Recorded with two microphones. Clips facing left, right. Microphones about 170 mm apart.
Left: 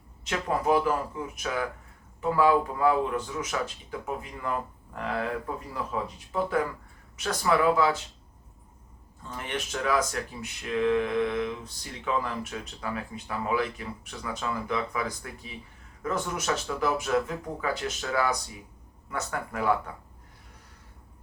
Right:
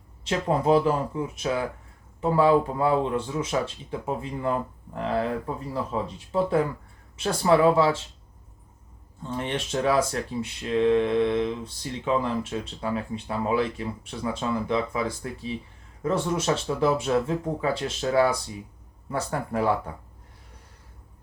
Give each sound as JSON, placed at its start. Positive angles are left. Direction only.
{"t": 0.3, "sound": "speech", "side_deg": -25}
{"t": 9.2, "sound": "speech", "side_deg": -30}